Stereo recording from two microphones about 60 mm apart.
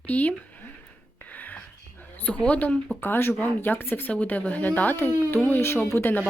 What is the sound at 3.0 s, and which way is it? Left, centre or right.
Speech, left.